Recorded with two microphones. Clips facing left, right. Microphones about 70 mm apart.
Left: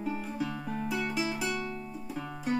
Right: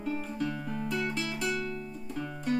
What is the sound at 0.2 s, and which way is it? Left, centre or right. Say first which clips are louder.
Music: right 1 dB; centre.